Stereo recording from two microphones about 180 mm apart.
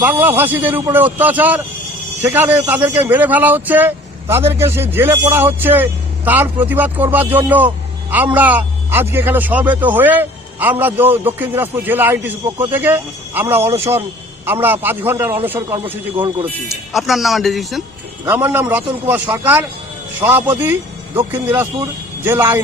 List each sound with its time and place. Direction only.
0.0 s a man's voice: 10° right (ahead or behind)
15.8 s speech: 30° right (ahead or behind)
16.9 s a man's voice: centre (ahead or behind)
21.6 s speech: 10° right (ahead or behind)